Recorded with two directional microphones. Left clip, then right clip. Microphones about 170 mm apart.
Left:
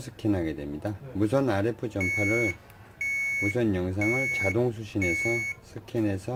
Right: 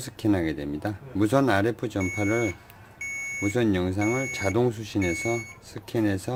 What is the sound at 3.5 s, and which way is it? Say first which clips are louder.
Speech: right 3 dB; 25° right (ahead or behind).